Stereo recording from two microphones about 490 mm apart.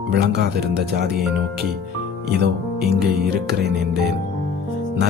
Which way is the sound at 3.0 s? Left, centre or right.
Centre.